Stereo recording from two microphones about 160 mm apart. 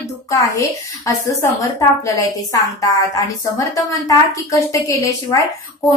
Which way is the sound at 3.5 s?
20° left (ahead or behind).